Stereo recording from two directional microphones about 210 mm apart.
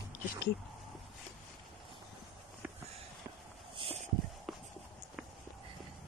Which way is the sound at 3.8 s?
25° right (ahead or behind).